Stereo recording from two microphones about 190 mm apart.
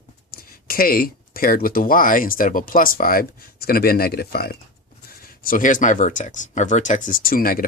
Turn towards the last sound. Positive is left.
turn(degrees=50)  # may be behind; listen again after turning